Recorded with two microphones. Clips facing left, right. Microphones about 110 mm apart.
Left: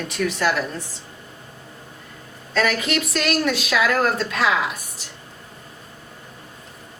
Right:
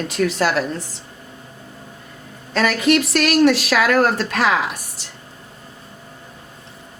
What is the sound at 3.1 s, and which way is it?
Speech, 75° right (ahead or behind).